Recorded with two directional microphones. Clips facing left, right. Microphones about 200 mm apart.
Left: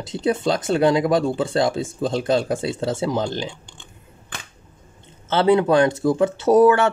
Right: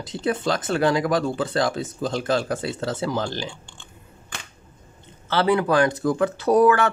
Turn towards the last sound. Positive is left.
turn(degrees=25)  # may be behind; listen again after turning